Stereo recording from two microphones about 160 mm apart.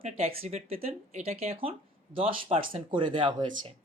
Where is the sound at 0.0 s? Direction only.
40° right (ahead or behind).